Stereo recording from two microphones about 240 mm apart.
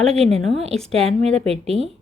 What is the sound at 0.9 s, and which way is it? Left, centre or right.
Speech, right.